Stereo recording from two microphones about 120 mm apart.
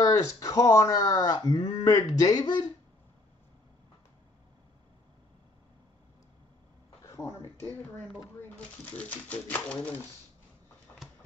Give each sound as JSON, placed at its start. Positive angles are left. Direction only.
{"t": 0.0, "sound": "speech", "side_deg": 30}
{"t": 7.1, "sound": "speech", "side_deg": 20}